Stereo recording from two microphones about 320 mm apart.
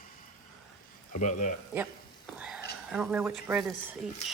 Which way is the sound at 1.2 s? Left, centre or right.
Left.